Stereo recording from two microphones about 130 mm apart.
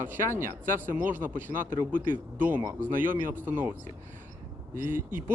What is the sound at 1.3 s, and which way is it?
Speech, 90° right.